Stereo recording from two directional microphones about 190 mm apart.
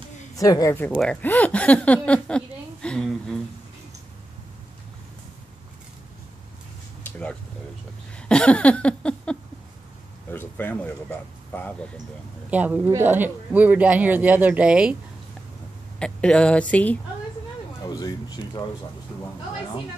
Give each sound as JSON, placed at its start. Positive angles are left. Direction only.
{"t": 0.4, "sound": "a woman's voice", "side_deg": 20}
{"t": 7.1, "sound": "a sound", "side_deg": 5}
{"t": 10.3, "sound": "speech", "side_deg": 10}
{"t": 12.4, "sound": "speech", "side_deg": -10}
{"t": 16.0, "sound": "speech", "side_deg": 5}
{"t": 17.8, "sound": "a sound", "side_deg": 20}